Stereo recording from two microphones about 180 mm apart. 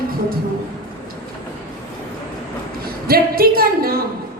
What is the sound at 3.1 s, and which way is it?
Speech, 55° right (ahead or behind).